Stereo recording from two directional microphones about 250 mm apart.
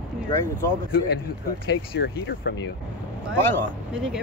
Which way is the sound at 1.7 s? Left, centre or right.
Left.